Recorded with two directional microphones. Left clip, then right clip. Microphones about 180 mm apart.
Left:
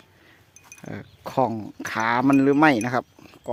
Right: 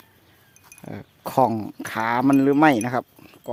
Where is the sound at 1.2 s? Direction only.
15° right (ahead or behind).